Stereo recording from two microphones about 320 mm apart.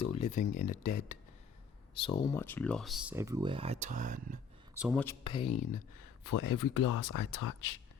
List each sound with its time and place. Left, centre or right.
0.0 s speech: centre
0.7 s speech: left
2.0 s speech: centre; by 4.4 s right
4.8 s speech: centre
5.2 s speech: centre
6.2 s speech: left